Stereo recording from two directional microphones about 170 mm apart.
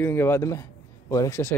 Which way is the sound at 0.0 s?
15° left (ahead or behind).